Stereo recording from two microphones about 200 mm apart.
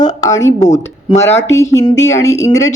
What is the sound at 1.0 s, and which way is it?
Speech, 15° left (ahead or behind).